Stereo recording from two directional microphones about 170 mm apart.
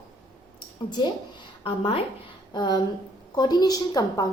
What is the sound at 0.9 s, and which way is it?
A woman's voice, 25° left (ahead or behind).